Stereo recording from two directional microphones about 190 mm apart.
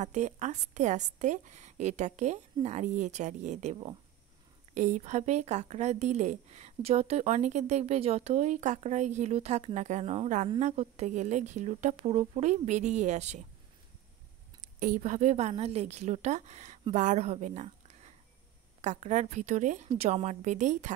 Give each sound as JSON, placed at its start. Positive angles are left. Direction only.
{"t": 0.0, "sound": "speech", "side_deg": -40}
{"t": 4.7, "sound": "speech", "side_deg": -40}
{"t": 14.8, "sound": "a woman's voice", "side_deg": -45}